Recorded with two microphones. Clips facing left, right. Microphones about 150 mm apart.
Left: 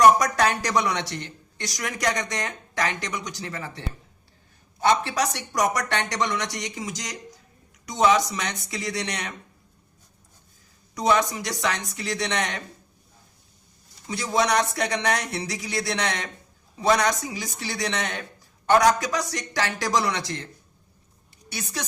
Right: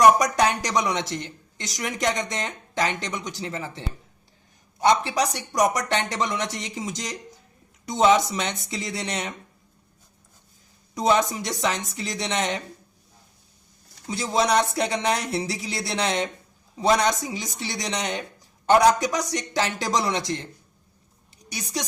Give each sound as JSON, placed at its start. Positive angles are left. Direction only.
{"t": 0.2, "sound": "speech", "side_deg": -20}
{"t": 4.9, "sound": "speech", "side_deg": -20}
{"t": 10.9, "sound": "speech", "side_deg": -25}
{"t": 14.1, "sound": "speech", "side_deg": -25}
{"t": 21.5, "sound": "a woman's voice", "side_deg": -15}